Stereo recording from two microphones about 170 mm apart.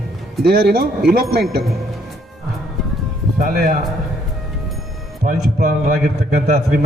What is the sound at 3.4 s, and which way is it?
Speech, 55° right (ahead or behind).